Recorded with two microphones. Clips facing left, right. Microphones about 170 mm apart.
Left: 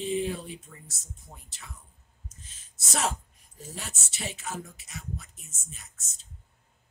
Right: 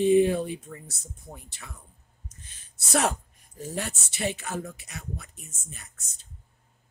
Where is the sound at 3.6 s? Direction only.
60° right (ahead or behind).